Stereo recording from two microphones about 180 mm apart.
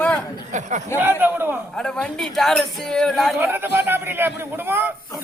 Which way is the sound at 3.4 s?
10° right (ahead or behind).